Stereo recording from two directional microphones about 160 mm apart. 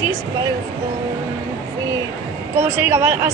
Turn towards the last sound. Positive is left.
turn(degrees=-15)  # may be behind; listen again after turning